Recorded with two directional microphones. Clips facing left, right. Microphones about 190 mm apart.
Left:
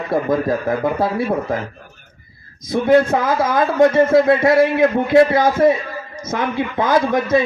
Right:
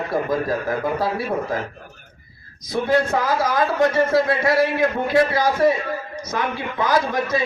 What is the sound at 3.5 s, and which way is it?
A man's voice, 25° left (ahead or behind).